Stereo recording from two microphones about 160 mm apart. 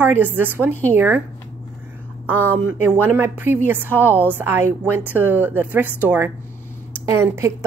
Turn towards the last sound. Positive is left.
turn(degrees=-15)  # may be behind; listen again after turning